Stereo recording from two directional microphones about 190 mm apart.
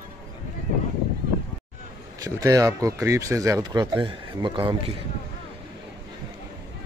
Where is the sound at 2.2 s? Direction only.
20° right (ahead or behind).